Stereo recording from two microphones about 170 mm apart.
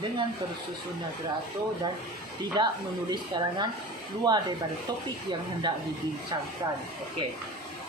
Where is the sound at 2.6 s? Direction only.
25° right (ahead or behind).